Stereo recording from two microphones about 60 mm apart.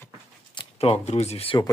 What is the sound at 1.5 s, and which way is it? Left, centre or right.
Speech, left.